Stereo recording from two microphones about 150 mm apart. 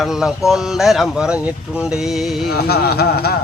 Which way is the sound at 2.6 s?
90° left.